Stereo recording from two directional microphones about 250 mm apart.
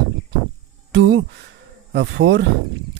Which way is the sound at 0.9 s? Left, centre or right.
Right.